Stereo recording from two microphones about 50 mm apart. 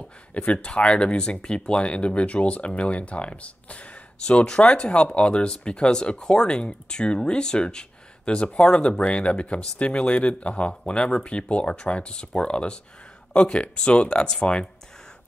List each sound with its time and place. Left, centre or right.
0.3 s speech: left